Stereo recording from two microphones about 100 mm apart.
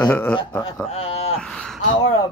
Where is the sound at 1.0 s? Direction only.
90° left.